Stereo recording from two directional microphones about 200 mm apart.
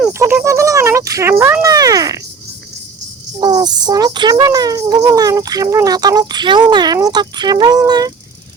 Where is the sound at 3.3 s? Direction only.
20° right (ahead or behind).